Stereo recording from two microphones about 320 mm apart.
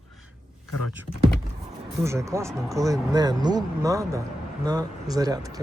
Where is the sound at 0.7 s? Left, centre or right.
Left.